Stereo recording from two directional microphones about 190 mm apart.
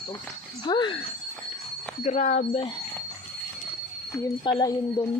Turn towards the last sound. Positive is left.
turn(degrees=25)  # may be behind; listen again after turning